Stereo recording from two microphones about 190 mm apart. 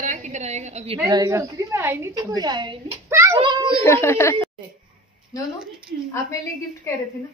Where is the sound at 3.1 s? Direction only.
15° right (ahead or behind).